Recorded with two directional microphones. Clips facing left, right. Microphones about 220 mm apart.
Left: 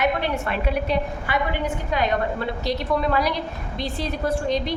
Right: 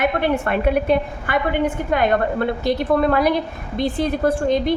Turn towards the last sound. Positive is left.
turn(degrees=-55)  # may be behind; listen again after turning